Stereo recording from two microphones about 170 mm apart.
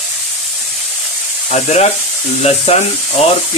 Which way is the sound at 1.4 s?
40° left (ahead or behind).